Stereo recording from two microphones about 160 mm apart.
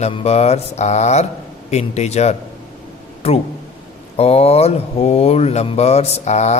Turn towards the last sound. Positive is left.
turn(degrees=45)  # may be behind; listen again after turning